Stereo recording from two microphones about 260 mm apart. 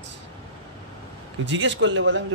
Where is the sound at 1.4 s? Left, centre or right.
Right.